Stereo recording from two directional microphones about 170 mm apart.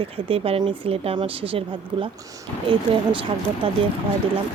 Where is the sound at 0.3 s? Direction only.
35° right (ahead or behind).